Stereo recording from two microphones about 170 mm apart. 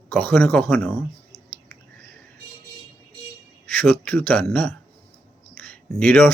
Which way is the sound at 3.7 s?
10° left (ahead or behind).